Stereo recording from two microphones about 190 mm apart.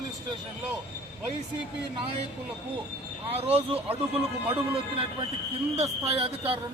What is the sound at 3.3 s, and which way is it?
Speech, 30° right (ahead or behind).